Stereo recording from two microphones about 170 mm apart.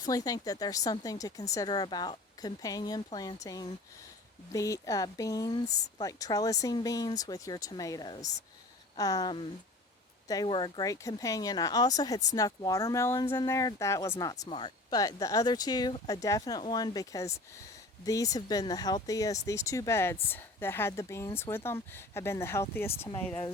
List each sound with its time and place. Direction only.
0.0 s speech: 20° left (ahead or behind)